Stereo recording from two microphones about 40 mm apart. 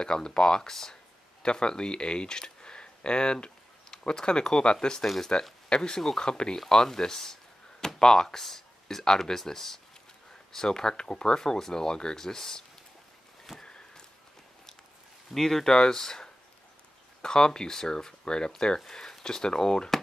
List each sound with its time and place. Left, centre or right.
0.0 s speech: centre
5.2 s speech: centre
13.5 s walk: centre
15.3 s speech: centre